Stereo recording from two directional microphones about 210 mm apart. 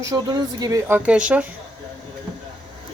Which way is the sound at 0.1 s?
20° right (ahead or behind).